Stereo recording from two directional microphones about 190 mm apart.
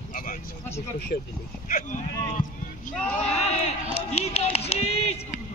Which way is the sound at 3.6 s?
35° left (ahead or behind).